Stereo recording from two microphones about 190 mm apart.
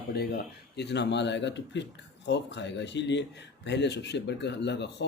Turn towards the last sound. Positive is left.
turn(degrees=65)  # may be behind; listen again after turning